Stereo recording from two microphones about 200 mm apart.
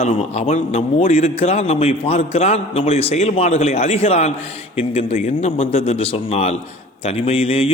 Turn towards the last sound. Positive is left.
turn(degrees=30)  # may be behind; listen again after turning